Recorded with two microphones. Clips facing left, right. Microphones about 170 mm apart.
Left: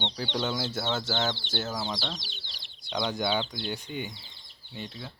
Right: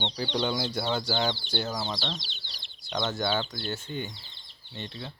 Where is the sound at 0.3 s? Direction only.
5° left (ahead or behind).